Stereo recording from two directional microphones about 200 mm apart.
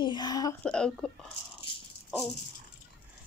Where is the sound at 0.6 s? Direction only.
5° left (ahead or behind).